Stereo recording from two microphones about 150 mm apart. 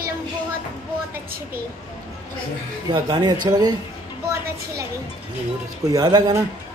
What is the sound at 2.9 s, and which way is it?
Speech, 30° right (ahead or behind).